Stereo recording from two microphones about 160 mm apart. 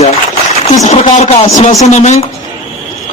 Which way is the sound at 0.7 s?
45° left (ahead or behind).